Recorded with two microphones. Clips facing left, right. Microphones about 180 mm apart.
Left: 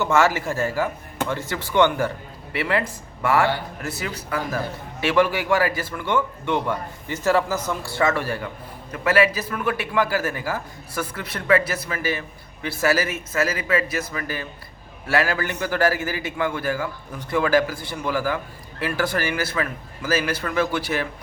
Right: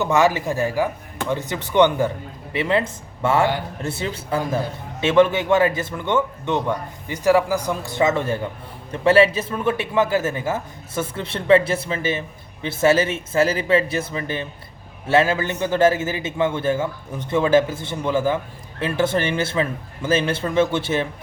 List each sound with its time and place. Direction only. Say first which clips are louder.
0.0 s speech: right 2 dB; 15° right (ahead or behind)